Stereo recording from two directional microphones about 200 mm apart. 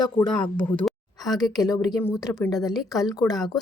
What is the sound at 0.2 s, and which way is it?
Speech, 20° left (ahead or behind).